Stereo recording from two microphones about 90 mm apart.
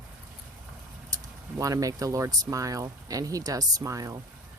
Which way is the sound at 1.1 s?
40° right (ahead or behind).